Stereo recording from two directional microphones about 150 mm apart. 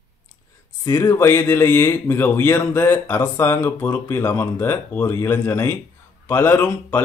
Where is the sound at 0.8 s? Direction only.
20° left (ahead or behind).